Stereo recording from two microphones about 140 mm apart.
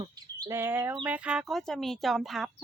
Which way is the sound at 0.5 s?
15° right (ahead or behind).